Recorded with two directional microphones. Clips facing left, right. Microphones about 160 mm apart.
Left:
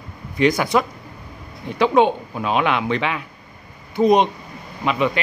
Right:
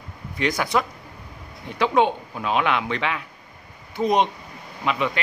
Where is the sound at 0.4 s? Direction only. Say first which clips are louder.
Left 5 dB; 15° left (ahead or behind).